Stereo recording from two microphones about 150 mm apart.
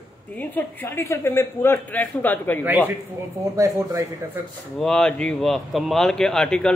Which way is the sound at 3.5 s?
20° right (ahead or behind).